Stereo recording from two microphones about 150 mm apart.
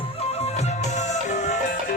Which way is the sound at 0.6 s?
50° left (ahead or behind).